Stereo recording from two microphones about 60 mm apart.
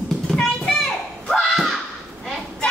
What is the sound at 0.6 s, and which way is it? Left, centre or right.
Children playing, centre.